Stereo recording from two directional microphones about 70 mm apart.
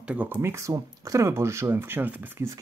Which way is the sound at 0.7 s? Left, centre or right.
Right.